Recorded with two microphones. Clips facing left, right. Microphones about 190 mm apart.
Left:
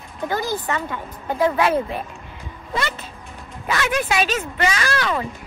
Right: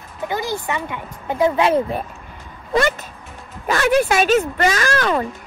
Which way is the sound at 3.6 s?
45° right (ahead or behind).